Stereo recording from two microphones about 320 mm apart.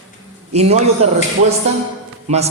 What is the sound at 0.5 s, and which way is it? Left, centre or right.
Speech, centre.